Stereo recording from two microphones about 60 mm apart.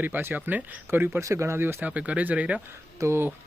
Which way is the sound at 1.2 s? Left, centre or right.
Right.